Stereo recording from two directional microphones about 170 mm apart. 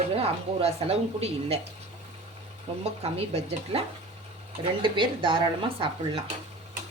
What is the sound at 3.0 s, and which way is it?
Speech, 35° right (ahead or behind).